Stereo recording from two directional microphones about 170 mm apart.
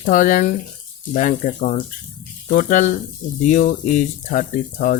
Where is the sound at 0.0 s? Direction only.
50° left (ahead or behind).